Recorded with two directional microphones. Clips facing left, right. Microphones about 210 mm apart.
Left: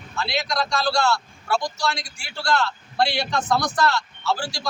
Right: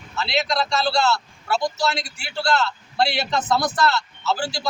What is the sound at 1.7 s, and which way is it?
Speech, 25° right (ahead or behind).